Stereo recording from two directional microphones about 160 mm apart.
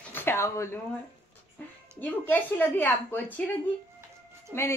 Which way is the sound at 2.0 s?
10° left (ahead or behind).